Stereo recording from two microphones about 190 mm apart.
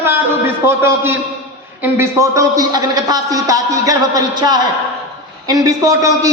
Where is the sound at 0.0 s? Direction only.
10° right (ahead or behind).